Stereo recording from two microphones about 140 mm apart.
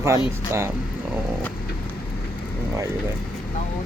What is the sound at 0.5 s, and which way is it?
Speech, 20° right (ahead or behind).